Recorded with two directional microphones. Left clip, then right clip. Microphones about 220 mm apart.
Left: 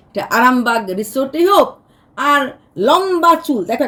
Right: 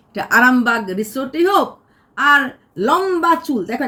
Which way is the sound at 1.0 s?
10° left (ahead or behind).